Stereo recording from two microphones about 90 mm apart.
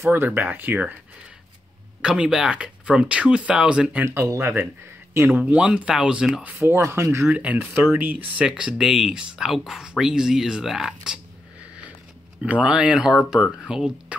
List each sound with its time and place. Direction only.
0.0 s speech: 25° right (ahead or behind)
2.0 s speech: 10° right (ahead or behind)
4.0 s speech: 30° right (ahead or behind); by 6.4 s 5° right (ahead or behind)
6.6 s speech: 30° right (ahead or behind)
7.2 s speech: 15° right (ahead or behind)
12.4 s speech: 15° right (ahead or behind)